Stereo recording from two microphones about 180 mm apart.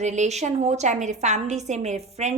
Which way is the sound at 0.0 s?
40° right (ahead or behind).